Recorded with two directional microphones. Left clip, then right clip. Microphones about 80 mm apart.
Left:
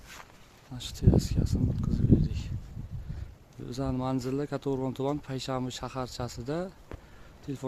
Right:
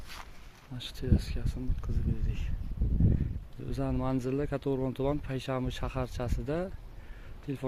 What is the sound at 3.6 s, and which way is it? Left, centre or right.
Speech, left.